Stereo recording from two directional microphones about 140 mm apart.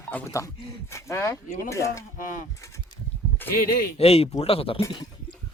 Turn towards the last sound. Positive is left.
turn(degrees=40)  # may be behind; listen again after turning